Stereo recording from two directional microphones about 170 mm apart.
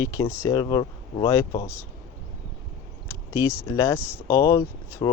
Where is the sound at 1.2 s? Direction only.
15° left (ahead or behind).